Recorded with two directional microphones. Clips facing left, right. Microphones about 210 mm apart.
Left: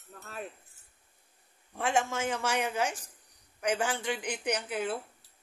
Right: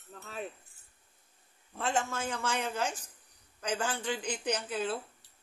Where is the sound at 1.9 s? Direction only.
90° left.